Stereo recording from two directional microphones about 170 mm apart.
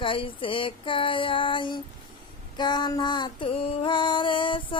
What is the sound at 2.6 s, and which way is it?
Female singing, 25° left (ahead or behind).